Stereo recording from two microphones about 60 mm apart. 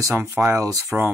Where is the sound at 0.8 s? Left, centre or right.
Right.